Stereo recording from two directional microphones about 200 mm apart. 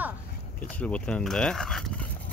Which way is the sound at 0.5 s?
5° left (ahead or behind).